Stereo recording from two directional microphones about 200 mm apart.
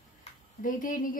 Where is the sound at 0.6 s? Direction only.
40° left (ahead or behind).